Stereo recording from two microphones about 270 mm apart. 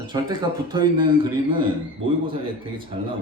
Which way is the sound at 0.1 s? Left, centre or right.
Centre.